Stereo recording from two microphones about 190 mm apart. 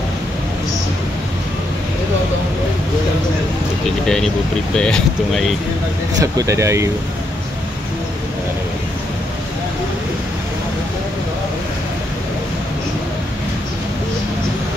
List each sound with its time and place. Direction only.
4.7 s speech: 5° left (ahead or behind)
6.3 s speech: 15° right (ahead or behind)